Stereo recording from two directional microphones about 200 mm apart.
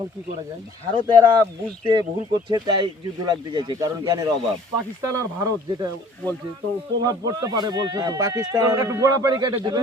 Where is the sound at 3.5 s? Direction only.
20° right (ahead or behind).